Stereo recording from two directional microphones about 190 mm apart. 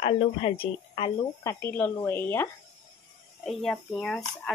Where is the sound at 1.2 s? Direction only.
15° left (ahead or behind).